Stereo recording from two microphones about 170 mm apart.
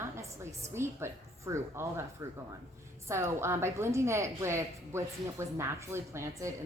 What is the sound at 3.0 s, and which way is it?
A woman's voice, 15° right (ahead or behind).